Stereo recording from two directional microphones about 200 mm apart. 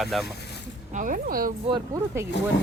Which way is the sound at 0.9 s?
40° right (ahead or behind).